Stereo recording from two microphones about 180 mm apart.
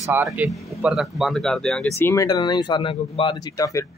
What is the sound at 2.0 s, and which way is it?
Speech, 15° left (ahead or behind).